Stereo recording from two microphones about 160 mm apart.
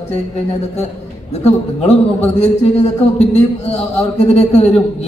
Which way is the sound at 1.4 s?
40° left (ahead or behind).